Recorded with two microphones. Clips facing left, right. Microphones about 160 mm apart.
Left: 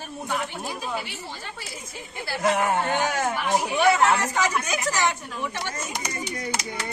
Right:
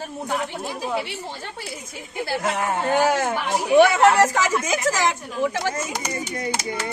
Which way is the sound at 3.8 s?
90° right.